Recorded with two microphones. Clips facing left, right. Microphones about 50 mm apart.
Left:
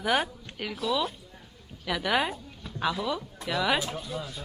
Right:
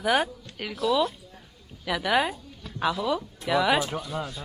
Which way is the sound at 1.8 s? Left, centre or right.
Centre.